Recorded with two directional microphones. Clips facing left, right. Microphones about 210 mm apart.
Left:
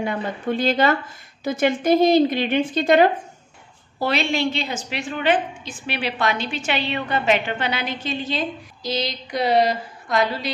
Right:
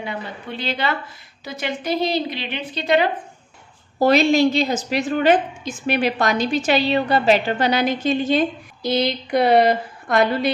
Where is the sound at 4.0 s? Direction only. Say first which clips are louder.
Right 7 dB; 40° right (ahead or behind).